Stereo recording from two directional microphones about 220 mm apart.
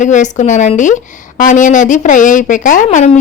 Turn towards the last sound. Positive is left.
turn(degrees=35)  # may be behind; listen again after turning